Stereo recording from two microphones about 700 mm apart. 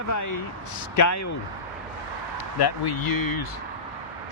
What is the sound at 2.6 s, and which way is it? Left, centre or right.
Speech, left.